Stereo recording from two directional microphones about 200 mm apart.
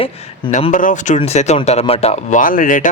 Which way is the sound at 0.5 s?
40° left (ahead or behind).